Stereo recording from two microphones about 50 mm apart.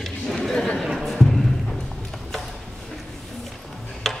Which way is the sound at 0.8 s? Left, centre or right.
Centre.